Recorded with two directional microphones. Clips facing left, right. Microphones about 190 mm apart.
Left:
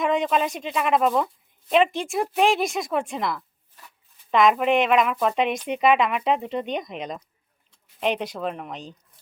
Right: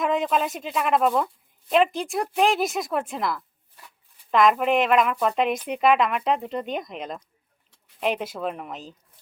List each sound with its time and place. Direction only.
0.0 s speech: centre (ahead or behind)